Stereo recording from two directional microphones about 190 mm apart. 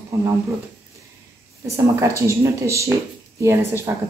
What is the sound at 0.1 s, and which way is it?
Speech, 15° right (ahead or behind).